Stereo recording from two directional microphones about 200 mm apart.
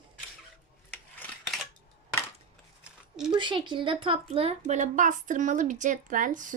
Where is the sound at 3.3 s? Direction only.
25° right (ahead or behind).